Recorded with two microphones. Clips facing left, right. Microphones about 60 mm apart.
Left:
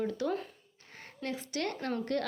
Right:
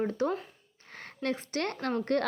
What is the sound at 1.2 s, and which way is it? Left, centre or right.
Speech, right.